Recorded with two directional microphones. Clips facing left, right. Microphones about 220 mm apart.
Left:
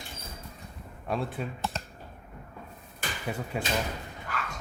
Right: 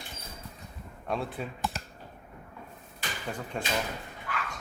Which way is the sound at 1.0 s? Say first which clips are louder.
Left 1 dB; centre (ahead or behind).